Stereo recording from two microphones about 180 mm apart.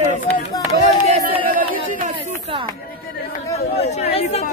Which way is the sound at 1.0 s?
35° right (ahead or behind).